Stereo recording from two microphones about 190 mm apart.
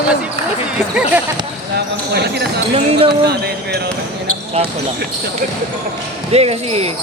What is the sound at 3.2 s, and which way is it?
Speech, 55° right (ahead or behind).